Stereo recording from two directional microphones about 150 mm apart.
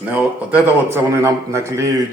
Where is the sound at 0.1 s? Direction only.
10° right (ahead or behind).